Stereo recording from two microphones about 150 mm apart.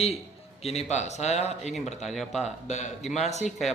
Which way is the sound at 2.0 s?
Centre (ahead or behind).